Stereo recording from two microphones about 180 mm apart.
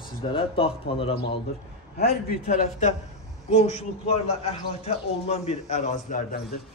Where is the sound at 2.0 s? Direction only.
50° left (ahead or behind).